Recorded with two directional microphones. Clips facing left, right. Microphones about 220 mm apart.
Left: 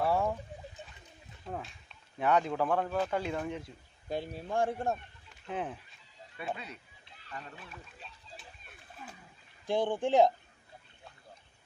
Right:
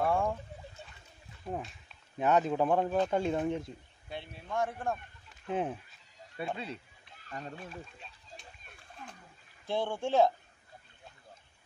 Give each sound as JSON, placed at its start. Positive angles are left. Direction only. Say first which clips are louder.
{"t": 0.0, "sound": "a sound", "louder": "even", "side_deg": 5}
{"t": 1.5, "sound": "speech", "louder": "right 3 dB", "side_deg": -20}
{"t": 4.1, "sound": "speech", "louder": "left 4 dB", "side_deg": 40}
{"t": 5.5, "sound": "speech", "louder": "right 4 dB", "side_deg": -20}
{"t": 7.2, "sound": "speech", "louder": "right 4 dB", "side_deg": -45}
{"t": 9.7, "sound": "speech", "louder": "left 3 dB", "side_deg": 15}